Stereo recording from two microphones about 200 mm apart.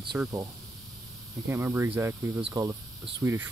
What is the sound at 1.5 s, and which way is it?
Speech, 10° right (ahead or behind).